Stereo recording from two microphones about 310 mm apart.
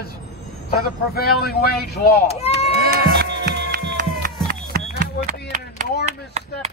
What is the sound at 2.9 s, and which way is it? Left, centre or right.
Music, right.